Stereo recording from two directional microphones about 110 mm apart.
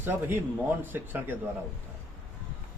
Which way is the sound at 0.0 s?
20° right (ahead or behind).